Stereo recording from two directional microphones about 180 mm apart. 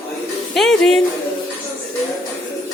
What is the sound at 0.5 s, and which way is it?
Speech, centre (ahead or behind).